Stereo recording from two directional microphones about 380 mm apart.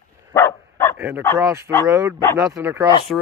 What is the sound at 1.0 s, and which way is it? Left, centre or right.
Speech, centre.